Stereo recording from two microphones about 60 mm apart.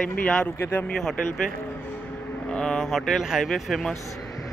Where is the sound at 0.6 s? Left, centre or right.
Left.